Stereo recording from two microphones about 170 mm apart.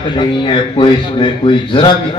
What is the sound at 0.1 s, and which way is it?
A man's voice, 30° left (ahead or behind).